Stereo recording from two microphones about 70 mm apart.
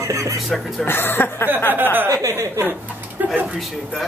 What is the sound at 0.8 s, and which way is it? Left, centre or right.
Speech, left.